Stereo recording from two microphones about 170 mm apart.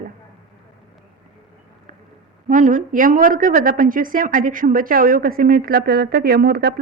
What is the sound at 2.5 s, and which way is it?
Speech, 50° right (ahead or behind).